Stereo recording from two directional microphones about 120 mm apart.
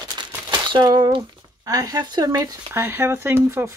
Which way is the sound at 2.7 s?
20° right (ahead or behind).